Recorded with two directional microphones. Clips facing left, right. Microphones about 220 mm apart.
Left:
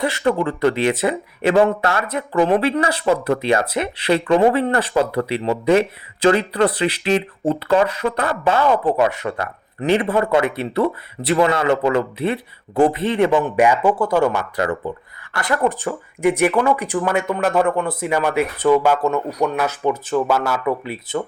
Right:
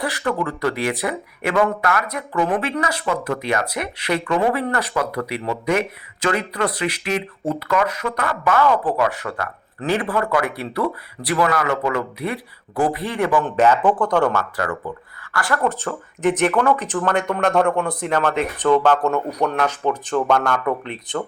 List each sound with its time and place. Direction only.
0.0 s speech: 25° left (ahead or behind)
13.4 s speech: 10° left (ahead or behind)
14.5 s speech: 25° left (ahead or behind); by 21.2 s 5° left (ahead or behind)